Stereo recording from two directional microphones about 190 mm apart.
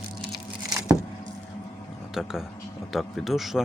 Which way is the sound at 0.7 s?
15° right (ahead or behind).